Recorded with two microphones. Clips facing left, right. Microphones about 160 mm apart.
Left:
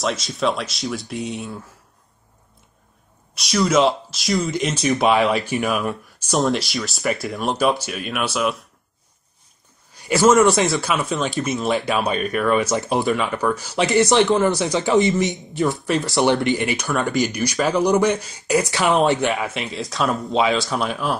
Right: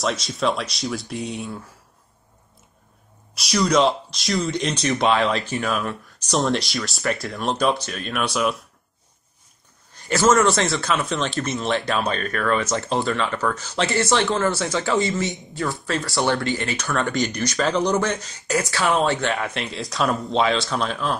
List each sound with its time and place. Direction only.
0.0 s speech: centre (ahead or behind)
3.3 s speech: centre (ahead or behind)
6.3 s speech: centre (ahead or behind)
9.9 s a man's voice: 10° left (ahead or behind)
19.3 s speech: centre (ahead or behind)